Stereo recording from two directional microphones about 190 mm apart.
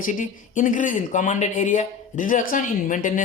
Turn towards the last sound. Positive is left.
turn(degrees=45)  # may be behind; listen again after turning